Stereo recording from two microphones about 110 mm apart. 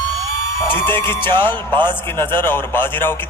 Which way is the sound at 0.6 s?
20° left (ahead or behind).